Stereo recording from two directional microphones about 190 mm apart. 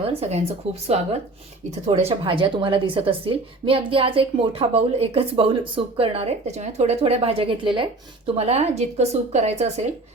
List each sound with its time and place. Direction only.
0.0 s a woman's voice: 30° right (ahead or behind)